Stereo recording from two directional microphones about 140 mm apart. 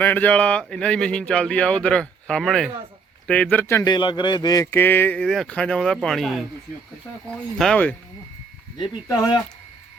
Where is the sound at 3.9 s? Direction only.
35° left (ahead or behind).